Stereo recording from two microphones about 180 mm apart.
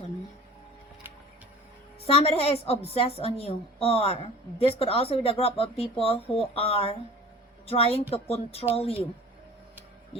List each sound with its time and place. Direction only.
2.0 s a woman's voice: 30° left (ahead or behind)